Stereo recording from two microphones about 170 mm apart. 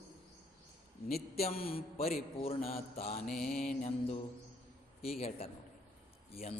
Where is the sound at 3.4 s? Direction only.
55° left (ahead or behind).